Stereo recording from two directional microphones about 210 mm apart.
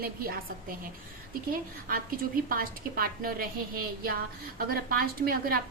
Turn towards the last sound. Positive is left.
turn(degrees=-45)  # may be behind; listen again after turning